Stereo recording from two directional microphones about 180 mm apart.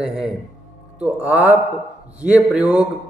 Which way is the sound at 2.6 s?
20° left (ahead or behind).